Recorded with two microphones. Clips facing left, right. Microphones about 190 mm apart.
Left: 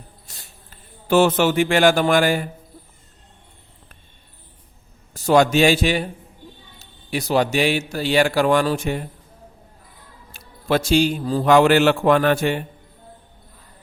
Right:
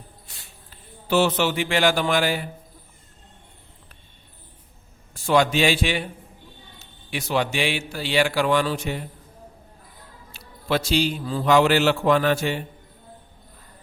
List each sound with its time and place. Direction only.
0.3 s a man's voice: 45° left (ahead or behind)
5.1 s a man's voice: 40° left (ahead or behind)
10.3 s a man's voice: 50° left (ahead or behind)